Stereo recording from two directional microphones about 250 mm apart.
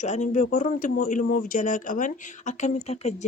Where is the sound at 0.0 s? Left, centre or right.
Left.